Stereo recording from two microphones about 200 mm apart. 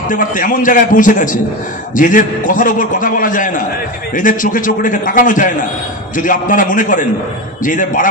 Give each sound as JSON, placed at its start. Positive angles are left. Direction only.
{"t": 0.1, "sound": "a man's voice", "side_deg": 40}